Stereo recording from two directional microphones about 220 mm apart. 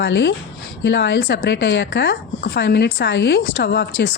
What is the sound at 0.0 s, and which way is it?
Speech, 50° left (ahead or behind).